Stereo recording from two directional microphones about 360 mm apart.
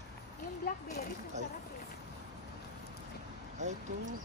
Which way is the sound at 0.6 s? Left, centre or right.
Left.